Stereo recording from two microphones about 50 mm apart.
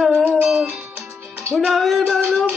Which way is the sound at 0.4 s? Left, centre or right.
Centre.